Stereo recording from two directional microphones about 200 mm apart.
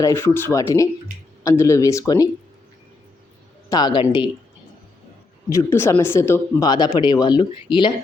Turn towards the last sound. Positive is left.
turn(degrees=25)  # may be behind; listen again after turning